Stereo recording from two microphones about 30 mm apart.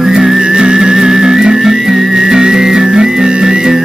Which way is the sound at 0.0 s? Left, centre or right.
Centre.